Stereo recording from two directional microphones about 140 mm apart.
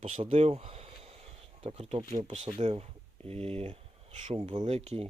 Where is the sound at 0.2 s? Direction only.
40° right (ahead or behind).